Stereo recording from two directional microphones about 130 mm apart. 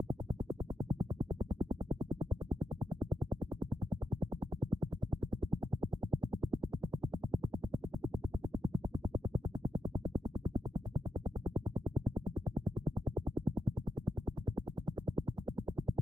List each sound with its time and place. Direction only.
0.8 s music: 35° right (ahead or behind)
6.5 s music: 35° right (ahead or behind)